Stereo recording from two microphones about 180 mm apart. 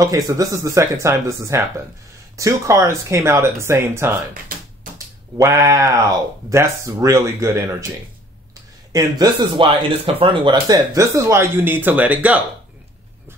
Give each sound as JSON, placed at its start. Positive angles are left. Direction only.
{"t": 0.0, "sound": "speech", "side_deg": -20}
{"t": 8.9, "sound": "speech", "side_deg": -20}